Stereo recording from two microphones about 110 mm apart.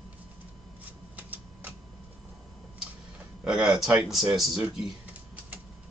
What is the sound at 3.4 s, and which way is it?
Speech, 5° right (ahead or behind).